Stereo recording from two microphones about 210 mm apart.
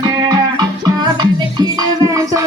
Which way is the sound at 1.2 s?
20° right (ahead or behind).